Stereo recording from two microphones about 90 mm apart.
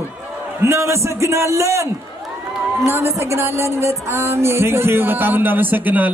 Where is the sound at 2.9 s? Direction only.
30° right (ahead or behind).